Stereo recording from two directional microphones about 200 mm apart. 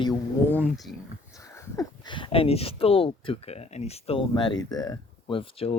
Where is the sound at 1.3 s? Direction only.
15° left (ahead or behind).